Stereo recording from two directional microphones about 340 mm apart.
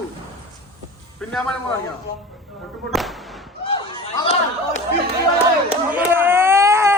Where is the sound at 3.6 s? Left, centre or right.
Centre.